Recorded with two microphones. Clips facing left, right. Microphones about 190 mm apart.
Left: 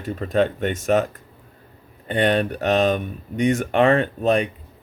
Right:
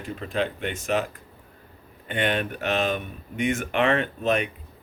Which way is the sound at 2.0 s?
35° left (ahead or behind).